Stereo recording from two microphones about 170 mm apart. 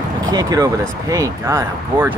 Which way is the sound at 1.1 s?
20° right (ahead or behind).